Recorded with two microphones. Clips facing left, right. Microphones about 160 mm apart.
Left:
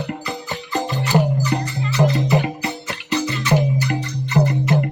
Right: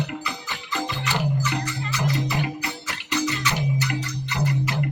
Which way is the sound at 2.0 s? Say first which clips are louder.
Left 9 dB; 50° left (ahead or behind).